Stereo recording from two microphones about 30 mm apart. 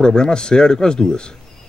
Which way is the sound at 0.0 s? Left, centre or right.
Left.